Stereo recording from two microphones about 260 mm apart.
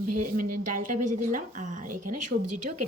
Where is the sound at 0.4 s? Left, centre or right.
Right.